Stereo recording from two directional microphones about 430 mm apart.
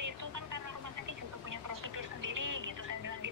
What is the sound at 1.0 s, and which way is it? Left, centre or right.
Telephone, right.